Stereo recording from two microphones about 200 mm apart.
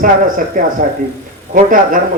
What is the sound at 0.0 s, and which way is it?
A man's voice, 40° right (ahead or behind).